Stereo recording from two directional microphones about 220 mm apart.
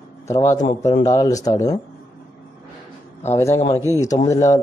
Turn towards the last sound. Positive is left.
turn(degrees=15)  # may be behind; listen again after turning